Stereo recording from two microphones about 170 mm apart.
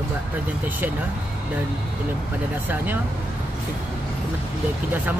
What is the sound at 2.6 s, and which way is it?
Speech, 10° right (ahead or behind).